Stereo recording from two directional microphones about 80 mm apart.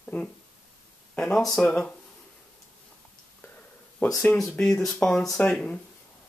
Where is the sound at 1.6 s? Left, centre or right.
Centre.